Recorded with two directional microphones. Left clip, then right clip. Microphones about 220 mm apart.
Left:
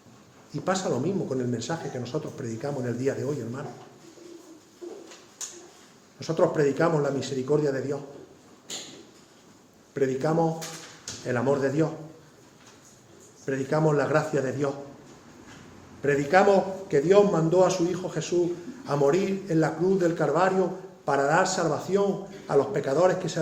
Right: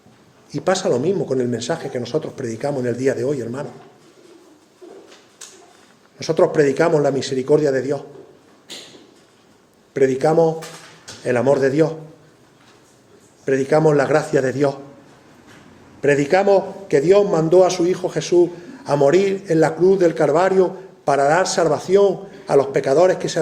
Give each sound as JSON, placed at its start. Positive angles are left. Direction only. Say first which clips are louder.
{"t": 0.5, "sound": "a man's voice", "louder": "right 9 dB", "side_deg": -30}
{"t": 6.1, "sound": "a man's voice", "louder": "right 8 dB", "side_deg": -30}
{"t": 9.9, "sound": "a man's voice", "louder": "right 10 dB", "side_deg": -30}
{"t": 13.4, "sound": "a man's voice", "louder": "right 10 dB", "side_deg": -30}
{"t": 16.0, "sound": "a man's voice", "louder": "right 5 dB", "side_deg": -30}